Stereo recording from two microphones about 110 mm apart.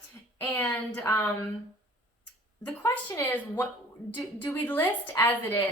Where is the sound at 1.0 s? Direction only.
25° left (ahead or behind).